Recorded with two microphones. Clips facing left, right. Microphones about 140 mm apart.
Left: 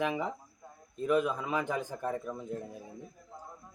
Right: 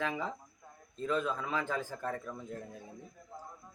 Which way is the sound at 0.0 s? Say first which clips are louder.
Left 4 dB; 15° left (ahead or behind).